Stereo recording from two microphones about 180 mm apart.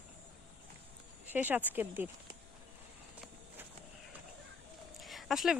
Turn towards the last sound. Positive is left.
turn(degrees=0)  # may be behind; listen again after turning